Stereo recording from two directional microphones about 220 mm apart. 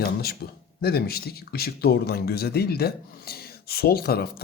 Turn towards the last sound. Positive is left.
turn(degrees=45)  # may be behind; listen again after turning